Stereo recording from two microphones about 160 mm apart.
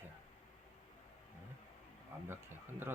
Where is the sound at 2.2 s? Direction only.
15° right (ahead or behind).